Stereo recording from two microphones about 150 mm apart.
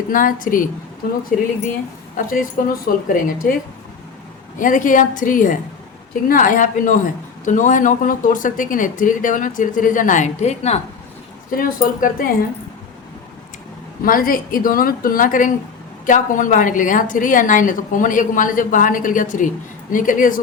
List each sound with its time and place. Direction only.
0.1 s speech: 65° left (ahead or behind)
2.1 s a woman's voice: 70° left (ahead or behind)
4.5 s speech: 60° left (ahead or behind)
11.5 s speech: 65° left (ahead or behind)
14.0 s a woman's voice: 70° left (ahead or behind)